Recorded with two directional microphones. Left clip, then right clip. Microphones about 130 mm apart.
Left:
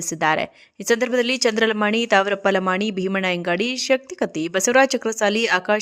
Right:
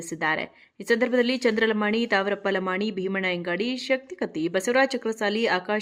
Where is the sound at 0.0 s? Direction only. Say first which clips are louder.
Left 6 dB; 45° left (ahead or behind).